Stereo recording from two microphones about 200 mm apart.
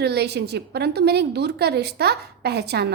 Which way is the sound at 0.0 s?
55° right (ahead or behind).